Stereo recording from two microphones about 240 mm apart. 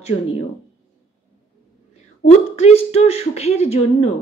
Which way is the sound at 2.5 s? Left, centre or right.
Left.